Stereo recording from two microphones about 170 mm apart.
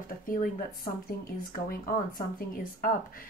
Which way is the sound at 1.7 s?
55° left (ahead or behind).